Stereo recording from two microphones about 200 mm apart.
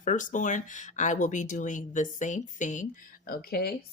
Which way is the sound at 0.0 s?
40° left (ahead or behind).